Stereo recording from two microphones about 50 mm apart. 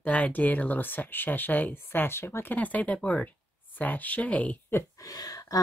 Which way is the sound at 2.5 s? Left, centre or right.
Left.